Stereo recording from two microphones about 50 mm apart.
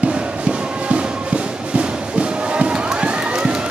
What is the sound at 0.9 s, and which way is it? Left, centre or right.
Music, right.